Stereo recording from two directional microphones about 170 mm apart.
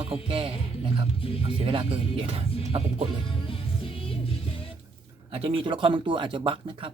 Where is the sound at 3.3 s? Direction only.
30° left (ahead or behind).